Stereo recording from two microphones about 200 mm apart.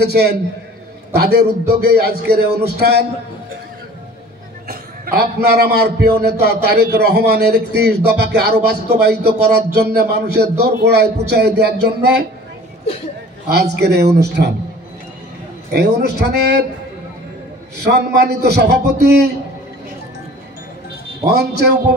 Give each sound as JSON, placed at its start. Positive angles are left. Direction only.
{"t": 0.0, "sound": "a man's voice", "side_deg": -55}
{"t": 4.6, "sound": "a man's voice", "side_deg": -50}
{"t": 13.5, "sound": "a man's voice", "side_deg": -55}
{"t": 15.7, "sound": "a man's voice", "side_deg": -55}
{"t": 17.8, "sound": "a man's voice", "side_deg": -55}
{"t": 21.3, "sound": "a man's voice", "side_deg": -55}